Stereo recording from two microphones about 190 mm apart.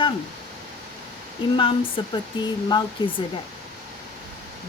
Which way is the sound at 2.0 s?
25° left (ahead or behind).